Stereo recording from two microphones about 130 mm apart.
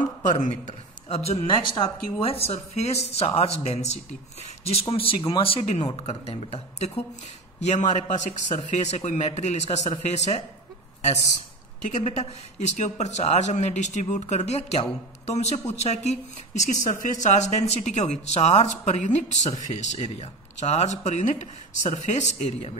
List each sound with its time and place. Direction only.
0.4 s speech: 55° left (ahead or behind); by 1.9 s 40° left (ahead or behind)
2.1 s speech: 50° left (ahead or behind)
7.6 s speech: 60° left (ahead or behind)
11.8 s speech: 60° left (ahead or behind)
16.8 s speech: 70° left (ahead or behind); by 22.8 s 55° left (ahead or behind)